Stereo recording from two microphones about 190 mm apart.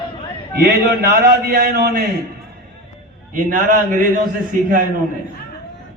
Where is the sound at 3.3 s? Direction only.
45° right (ahead or behind).